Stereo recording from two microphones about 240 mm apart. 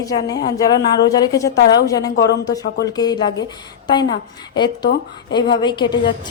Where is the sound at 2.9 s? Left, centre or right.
Centre.